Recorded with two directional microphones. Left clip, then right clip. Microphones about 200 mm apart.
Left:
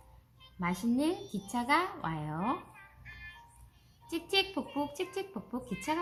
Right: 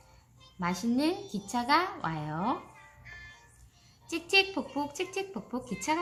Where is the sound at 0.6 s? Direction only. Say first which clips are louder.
Right 2 dB; 5° right (ahead or behind).